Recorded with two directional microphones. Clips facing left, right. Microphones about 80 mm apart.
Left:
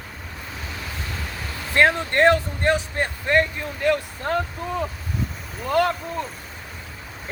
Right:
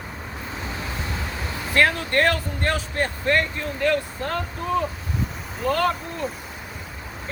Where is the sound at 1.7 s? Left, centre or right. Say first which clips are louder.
Left 2 dB; left.